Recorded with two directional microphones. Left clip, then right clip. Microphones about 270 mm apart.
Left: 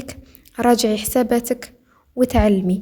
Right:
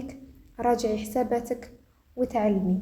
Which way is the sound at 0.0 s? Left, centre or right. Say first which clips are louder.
Left 5 dB; left.